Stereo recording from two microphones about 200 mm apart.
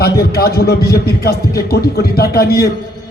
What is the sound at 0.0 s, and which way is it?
A man's voice, 50° left (ahead or behind).